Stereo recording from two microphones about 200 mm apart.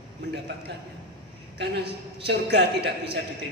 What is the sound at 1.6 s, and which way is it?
A woman's voice, 55° right (ahead or behind).